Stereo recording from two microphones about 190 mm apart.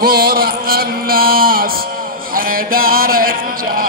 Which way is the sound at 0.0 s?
50° right (ahead or behind).